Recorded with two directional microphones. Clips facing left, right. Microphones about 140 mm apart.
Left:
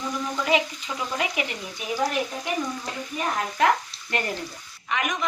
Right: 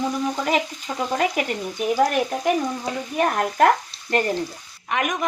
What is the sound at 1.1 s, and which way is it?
Speech, 45° right (ahead or behind).